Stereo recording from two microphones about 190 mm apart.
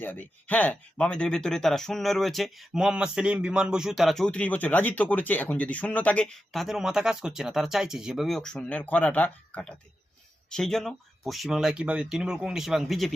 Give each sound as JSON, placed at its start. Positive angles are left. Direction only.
{"t": 0.0, "sound": "speech", "side_deg": 10}